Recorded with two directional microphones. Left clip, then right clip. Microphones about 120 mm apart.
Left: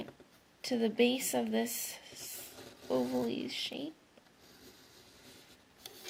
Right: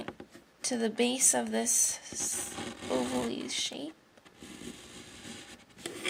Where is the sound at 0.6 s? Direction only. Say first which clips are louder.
Even; 25° right (ahead or behind).